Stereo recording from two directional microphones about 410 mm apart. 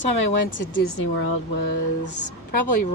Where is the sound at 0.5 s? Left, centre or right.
Left.